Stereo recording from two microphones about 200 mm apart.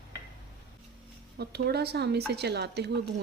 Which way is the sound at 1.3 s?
55° right (ahead or behind).